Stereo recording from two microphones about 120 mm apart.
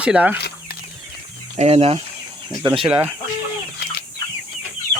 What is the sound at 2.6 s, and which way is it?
Speech, 45° right (ahead or behind).